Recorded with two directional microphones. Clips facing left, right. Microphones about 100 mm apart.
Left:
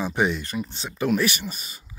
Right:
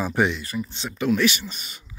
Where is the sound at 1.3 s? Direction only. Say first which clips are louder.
Left 2 dB; 45° left (ahead or behind).